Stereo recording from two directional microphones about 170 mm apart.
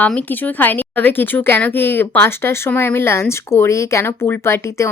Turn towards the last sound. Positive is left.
turn(degrees=15)  # may be behind; listen again after turning